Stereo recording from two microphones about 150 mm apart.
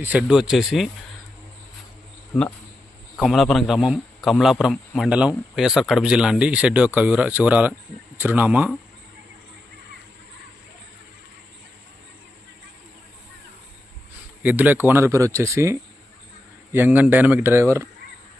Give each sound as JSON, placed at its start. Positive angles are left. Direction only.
{"t": 0.0, "sound": "a man's voice", "side_deg": -10}
{"t": 3.2, "sound": "a man's voice", "side_deg": 0}
{"t": 14.4, "sound": "speech", "side_deg": -10}